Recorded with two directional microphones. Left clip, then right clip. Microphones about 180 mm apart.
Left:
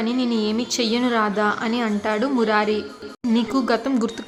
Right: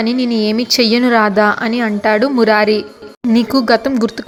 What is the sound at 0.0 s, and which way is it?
A woman's voice, 30° right (ahead or behind).